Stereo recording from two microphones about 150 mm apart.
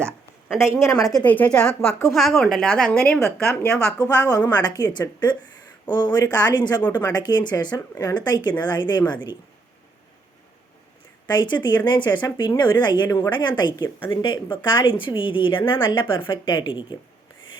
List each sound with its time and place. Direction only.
0.8 s a woman's voice: 20° left (ahead or behind)
1.2 s a woman's voice: 10° left (ahead or behind)
3.7 s a woman's voice: 20° left (ahead or behind)
11.3 s a woman's voice: 30° left (ahead or behind)